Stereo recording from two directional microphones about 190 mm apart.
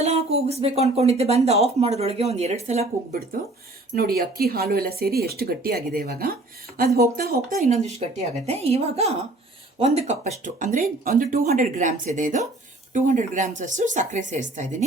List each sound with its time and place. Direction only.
0.0 s speech: 35° right (ahead or behind)
3.9 s speech: 50° right (ahead or behind)
7.7 s speech: 35° right (ahead or behind)